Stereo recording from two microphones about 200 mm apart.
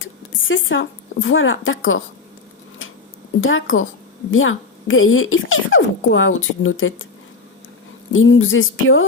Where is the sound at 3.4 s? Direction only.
85° left.